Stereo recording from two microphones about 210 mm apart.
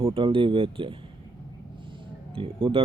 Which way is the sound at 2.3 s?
25° right (ahead or behind).